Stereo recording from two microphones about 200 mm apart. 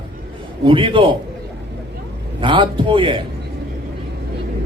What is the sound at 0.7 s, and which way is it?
Speech, 25° right (ahead or behind).